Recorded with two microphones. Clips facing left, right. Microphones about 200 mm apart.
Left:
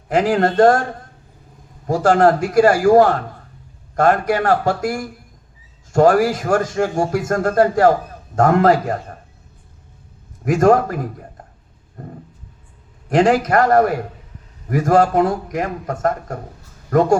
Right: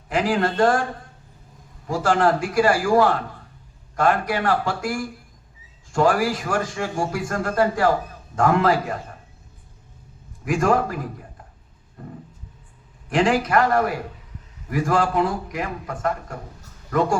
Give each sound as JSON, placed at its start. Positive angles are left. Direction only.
{"t": 0.1, "sound": "a man's voice", "side_deg": 45}
{"t": 1.9, "sound": "a man's voice", "side_deg": 45}
{"t": 10.4, "sound": "a man's voice", "side_deg": 45}
{"t": 12.0, "sound": "a sound", "side_deg": 45}
{"t": 13.1, "sound": "a man's voice", "side_deg": 40}